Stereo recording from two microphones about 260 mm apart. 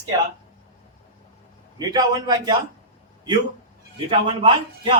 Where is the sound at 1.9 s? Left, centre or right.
Centre.